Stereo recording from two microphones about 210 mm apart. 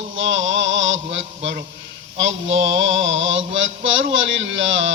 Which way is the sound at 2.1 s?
65° right (ahead or behind).